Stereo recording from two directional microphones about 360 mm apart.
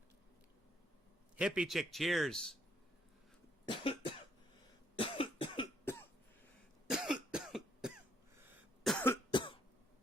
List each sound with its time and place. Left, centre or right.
1.4 s speech: centre
3.7 s cough: centre
9.3 s cough: centre